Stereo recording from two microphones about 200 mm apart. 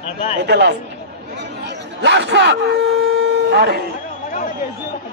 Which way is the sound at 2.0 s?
60° right (ahead or behind).